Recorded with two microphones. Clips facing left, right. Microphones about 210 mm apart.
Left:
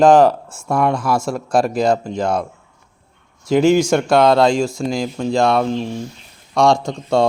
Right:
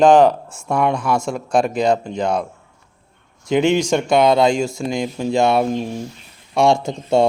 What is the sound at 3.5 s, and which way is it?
Speech, centre (ahead or behind).